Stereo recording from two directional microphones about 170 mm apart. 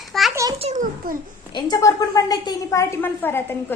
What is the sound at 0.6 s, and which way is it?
Speech, 50° right (ahead or behind).